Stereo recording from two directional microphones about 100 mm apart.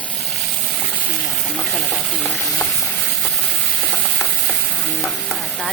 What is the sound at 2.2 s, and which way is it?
Stir, 5° left (ahead or behind).